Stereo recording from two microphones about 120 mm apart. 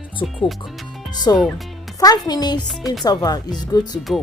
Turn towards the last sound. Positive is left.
turn(degrees=35)  # may be behind; listen again after turning